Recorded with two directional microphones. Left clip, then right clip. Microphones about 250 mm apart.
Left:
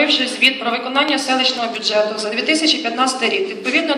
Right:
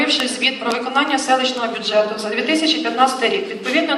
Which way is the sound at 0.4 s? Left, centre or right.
Left.